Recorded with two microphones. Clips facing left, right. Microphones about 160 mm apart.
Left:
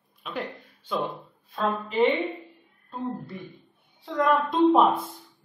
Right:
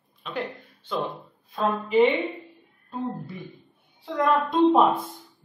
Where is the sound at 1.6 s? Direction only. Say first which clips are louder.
Right 3 dB; centre (ahead or behind).